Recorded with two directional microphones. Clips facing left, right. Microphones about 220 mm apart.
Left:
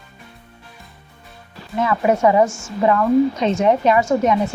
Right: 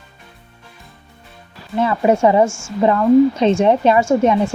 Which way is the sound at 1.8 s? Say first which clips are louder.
Right 2 dB; 30° right (ahead or behind).